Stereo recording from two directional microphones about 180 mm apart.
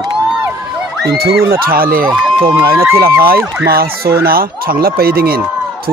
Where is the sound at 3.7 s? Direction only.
55° right (ahead or behind).